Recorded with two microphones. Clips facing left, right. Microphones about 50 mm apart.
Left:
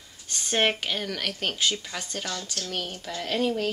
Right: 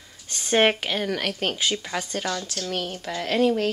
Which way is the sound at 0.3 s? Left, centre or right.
Centre.